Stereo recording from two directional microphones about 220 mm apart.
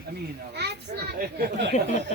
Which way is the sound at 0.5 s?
50° right (ahead or behind).